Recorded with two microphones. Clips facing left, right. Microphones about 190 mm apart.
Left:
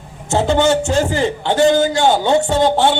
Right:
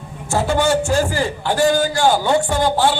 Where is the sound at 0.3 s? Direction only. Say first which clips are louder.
Left 3 dB; 25° left (ahead or behind).